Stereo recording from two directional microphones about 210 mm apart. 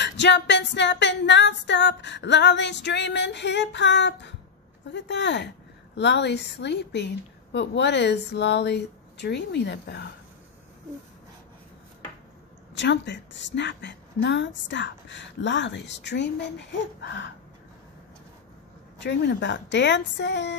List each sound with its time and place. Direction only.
0.0 s a woman's voice: 55° left (ahead or behind)
12.7 s a woman's voice: 55° left (ahead or behind)
18.9 s a woman's voice: 55° left (ahead or behind)